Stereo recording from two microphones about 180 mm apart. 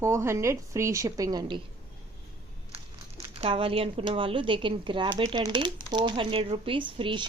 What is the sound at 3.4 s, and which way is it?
Speech, 30° right (ahead or behind).